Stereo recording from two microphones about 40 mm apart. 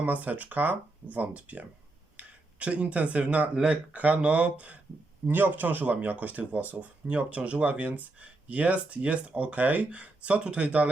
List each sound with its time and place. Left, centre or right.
0.0 s speech: right
3.9 s speech: right
5.2 s speech: right